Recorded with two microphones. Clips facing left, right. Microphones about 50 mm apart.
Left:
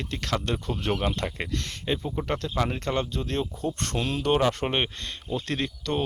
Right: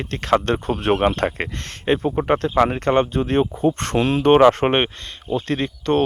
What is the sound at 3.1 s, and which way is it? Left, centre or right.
Speech, right.